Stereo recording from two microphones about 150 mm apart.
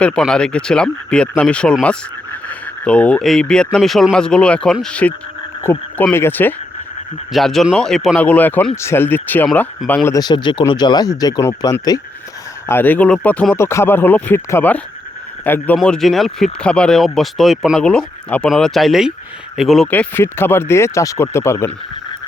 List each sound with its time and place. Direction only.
0.0 s speech: 5° left (ahead or behind)
7.3 s speech: centre (ahead or behind)
19.9 s speech: 15° left (ahead or behind)